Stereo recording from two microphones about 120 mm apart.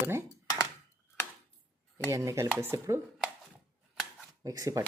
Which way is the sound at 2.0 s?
25° right (ahead or behind).